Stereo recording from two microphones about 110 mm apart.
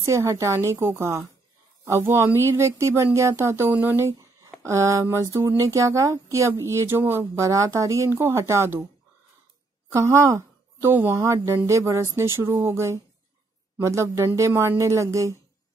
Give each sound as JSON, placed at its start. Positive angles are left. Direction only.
{"t": 0.0, "sound": "a woman's voice", "side_deg": -25}
{"t": 9.9, "sound": "a woman's voice", "side_deg": -25}